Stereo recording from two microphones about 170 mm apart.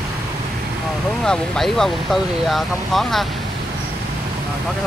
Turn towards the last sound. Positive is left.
turn(degrees=0)  # may be behind; listen again after turning